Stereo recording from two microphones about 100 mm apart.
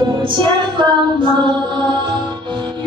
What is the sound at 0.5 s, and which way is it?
Female singing, 50° right (ahead or behind).